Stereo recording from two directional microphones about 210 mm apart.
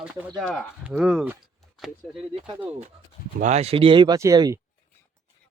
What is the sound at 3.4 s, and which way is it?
Speech, 30° right (ahead or behind).